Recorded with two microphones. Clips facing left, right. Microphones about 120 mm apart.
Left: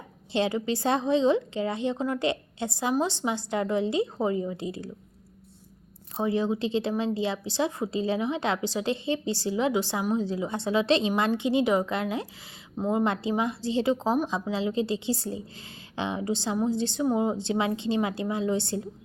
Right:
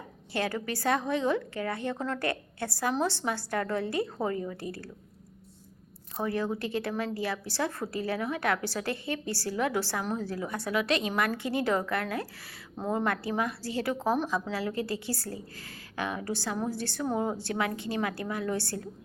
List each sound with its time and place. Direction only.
0.3 s a woman's voice: 20° left (ahead or behind)
6.1 s a woman's voice: 20° left (ahead or behind)
13.1 s a woman's voice: 20° left (ahead or behind)